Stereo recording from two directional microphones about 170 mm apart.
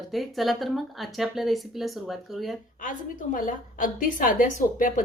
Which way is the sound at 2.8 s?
50° left (ahead or behind).